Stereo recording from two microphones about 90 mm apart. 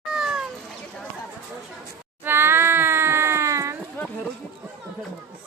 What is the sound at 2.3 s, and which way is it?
Cat, 25° right (ahead or behind).